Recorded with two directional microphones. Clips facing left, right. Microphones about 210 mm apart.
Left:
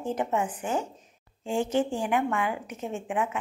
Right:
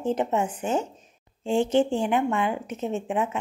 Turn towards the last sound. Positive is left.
turn(degrees=-25)  # may be behind; listen again after turning